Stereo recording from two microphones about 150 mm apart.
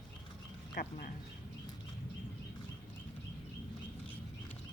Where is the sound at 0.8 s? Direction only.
85° left.